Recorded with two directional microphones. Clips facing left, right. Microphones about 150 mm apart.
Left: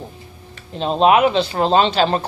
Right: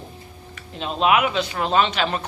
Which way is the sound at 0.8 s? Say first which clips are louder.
Left 6 dB; 35° left (ahead or behind).